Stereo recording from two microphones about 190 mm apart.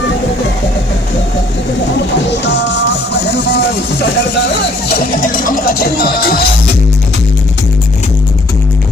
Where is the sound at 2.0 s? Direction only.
70° left (ahead or behind); by 6.4 s 55° left (ahead or behind).